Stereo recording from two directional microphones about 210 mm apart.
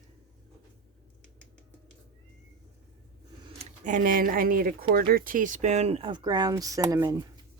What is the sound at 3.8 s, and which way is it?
Speech, 40° right (ahead or behind).